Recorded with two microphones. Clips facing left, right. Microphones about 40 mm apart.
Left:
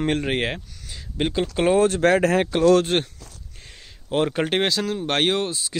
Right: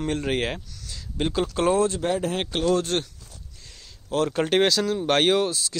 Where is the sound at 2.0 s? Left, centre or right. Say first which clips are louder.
Left 7 dB; left.